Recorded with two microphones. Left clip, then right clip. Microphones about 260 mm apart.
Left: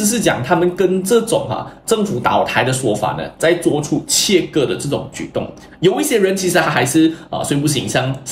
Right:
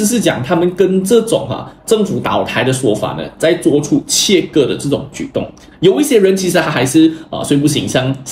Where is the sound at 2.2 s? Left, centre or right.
Centre.